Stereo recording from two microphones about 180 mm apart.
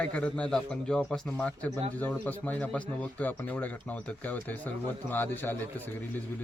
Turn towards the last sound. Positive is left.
turn(degrees=10)  # may be behind; listen again after turning